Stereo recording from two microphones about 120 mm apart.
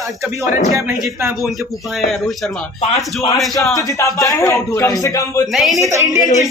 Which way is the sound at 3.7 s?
25° left (ahead or behind).